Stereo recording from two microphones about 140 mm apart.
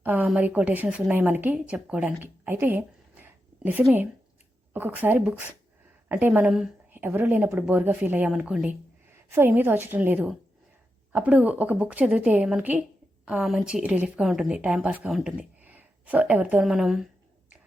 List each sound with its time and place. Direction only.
0.0 s a woman's voice: 10° right (ahead or behind)
6.9 s a woman's voice: 15° right (ahead or behind)